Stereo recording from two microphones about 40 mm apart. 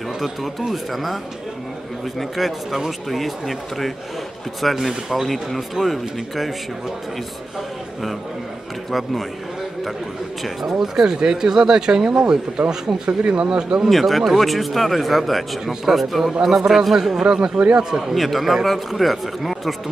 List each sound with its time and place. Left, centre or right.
0.2 s speech: centre
10.4 s a man's voice: centre
13.8 s a man's voice: centre
18.1 s speech: centre